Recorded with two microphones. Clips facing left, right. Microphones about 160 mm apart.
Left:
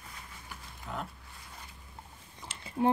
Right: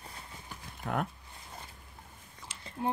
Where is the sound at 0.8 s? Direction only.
60° right (ahead or behind).